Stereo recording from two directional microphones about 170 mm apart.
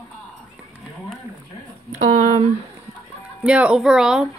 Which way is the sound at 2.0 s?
45° right (ahead or behind).